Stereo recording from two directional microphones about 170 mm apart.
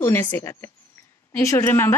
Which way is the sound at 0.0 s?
10° left (ahead or behind).